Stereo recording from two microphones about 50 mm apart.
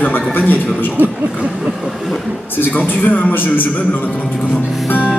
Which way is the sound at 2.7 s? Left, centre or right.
Left.